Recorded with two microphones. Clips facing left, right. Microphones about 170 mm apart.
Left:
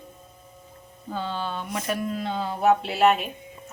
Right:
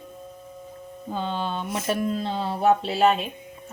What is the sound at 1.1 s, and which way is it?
Speech, 20° right (ahead or behind).